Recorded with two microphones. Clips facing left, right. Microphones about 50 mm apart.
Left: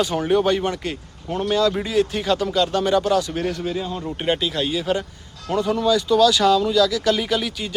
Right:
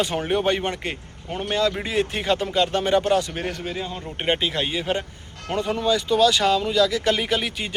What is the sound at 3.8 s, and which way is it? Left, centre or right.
Speech, centre.